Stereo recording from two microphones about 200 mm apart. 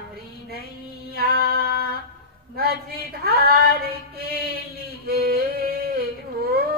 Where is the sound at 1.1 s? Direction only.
50° right (ahead or behind).